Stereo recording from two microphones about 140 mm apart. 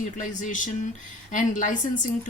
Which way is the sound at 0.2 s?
65° left (ahead or behind).